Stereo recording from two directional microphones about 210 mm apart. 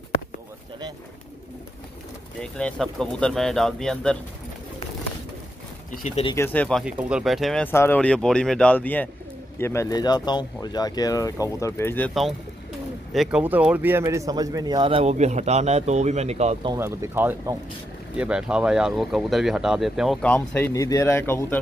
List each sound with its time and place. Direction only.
2.4 s speech: 5° left (ahead or behind)
5.9 s speech: 35° left (ahead or behind)
6.3 s speech: 10° left (ahead or behind)
6.8 s speech: 5° right (ahead or behind)
12.1 s speech: centre (ahead or behind); by 16.7 s 30° right (ahead or behind)
16.7 s speech: 10° right (ahead or behind); by 21.5 s 10° left (ahead or behind)